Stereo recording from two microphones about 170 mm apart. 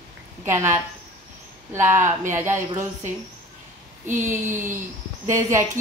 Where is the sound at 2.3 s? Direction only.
15° right (ahead or behind).